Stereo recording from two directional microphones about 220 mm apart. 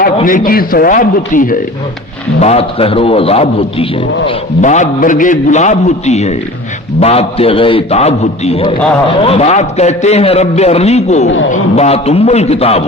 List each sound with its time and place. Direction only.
0.2 s a man's voice: 35° left (ahead or behind)
2.4 s a man's voice: 30° left (ahead or behind)